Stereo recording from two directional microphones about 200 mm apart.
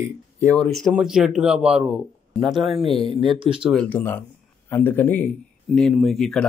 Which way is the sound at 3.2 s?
25° right (ahead or behind).